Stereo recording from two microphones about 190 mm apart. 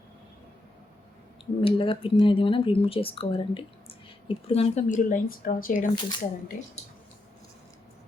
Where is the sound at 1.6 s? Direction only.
30° left (ahead or behind); by 5.8 s 45° left (ahead or behind).